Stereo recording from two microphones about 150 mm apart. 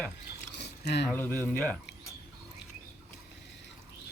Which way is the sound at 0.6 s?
90° left.